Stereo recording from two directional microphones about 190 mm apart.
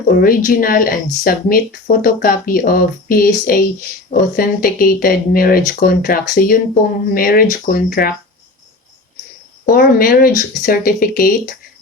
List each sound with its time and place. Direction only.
0.1 s speech: 50° left (ahead or behind)
9.6 s speech: 50° left (ahead or behind)